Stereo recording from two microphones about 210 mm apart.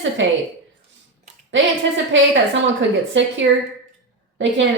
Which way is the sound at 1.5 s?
60° right (ahead or behind).